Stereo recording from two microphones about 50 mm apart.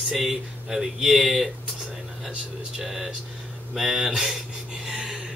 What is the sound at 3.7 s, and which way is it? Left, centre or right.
Mantra, centre.